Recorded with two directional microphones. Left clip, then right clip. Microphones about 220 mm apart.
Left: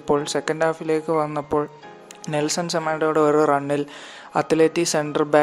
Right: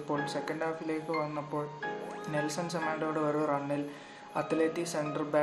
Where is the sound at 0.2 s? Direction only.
45° left (ahead or behind).